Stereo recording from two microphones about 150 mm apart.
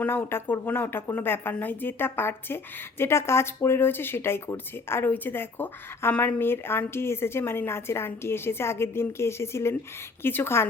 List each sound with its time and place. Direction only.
0.0 s speech: 10° left (ahead or behind)